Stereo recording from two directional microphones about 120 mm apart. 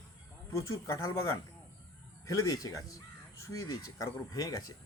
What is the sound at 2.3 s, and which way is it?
Speech, 30° left (ahead or behind).